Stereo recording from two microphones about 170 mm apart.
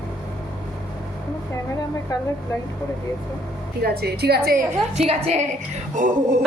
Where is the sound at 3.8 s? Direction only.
65° right (ahead or behind).